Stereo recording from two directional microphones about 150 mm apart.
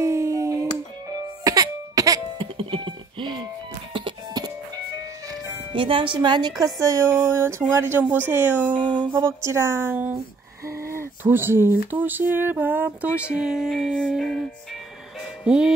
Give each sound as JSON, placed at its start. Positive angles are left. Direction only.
{"t": 0.0, "sound": "a sound", "side_deg": -20}
{"t": 1.4, "sound": "cough", "side_deg": -25}
{"t": 2.5, "sound": "music", "side_deg": -35}
{"t": 5.3, "sound": "speech", "side_deg": -35}
{"t": 8.7, "sound": "music", "side_deg": 10}
{"t": 9.1, "sound": "speech", "side_deg": -20}
{"t": 15.4, "sound": "music", "side_deg": -5}